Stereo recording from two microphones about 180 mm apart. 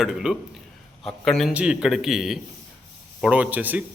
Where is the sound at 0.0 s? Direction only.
5° right (ahead or behind).